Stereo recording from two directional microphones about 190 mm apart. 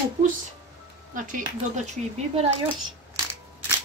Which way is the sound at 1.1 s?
45° right (ahead or behind).